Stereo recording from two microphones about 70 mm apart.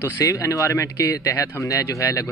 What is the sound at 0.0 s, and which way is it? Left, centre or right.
A man's voice, left.